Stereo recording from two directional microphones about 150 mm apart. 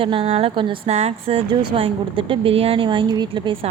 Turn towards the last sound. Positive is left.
turn(degrees=-35)  # may be behind; listen again after turning